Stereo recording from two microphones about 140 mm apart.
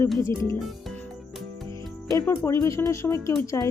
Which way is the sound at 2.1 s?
25° left (ahead or behind).